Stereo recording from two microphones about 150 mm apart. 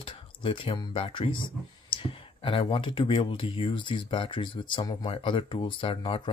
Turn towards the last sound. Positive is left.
turn(degrees=35)  # may be behind; listen again after turning